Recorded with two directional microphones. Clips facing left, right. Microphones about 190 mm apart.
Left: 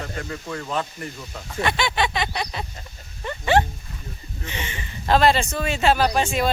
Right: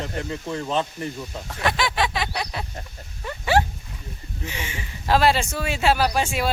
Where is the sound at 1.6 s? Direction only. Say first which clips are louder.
Even; centre (ahead or behind).